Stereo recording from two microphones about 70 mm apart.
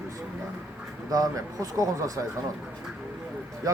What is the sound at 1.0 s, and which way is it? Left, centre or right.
Speech, right.